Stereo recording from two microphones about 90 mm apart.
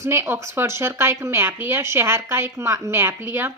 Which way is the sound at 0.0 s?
30° right (ahead or behind).